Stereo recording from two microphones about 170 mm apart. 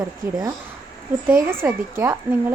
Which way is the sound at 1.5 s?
15° right (ahead or behind).